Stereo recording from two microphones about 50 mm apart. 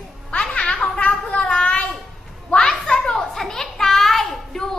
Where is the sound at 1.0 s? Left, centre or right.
Left; by 4.8 s centre.